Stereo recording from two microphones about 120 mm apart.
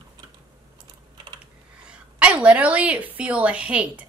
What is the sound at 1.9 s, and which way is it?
A woman's voice, 10° right (ahead or behind).